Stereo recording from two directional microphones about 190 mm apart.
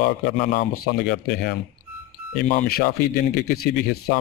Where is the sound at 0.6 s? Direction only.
60° left (ahead or behind).